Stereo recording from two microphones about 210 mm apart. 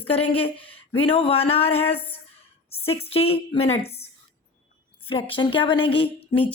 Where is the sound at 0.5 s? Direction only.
10° left (ahead or behind).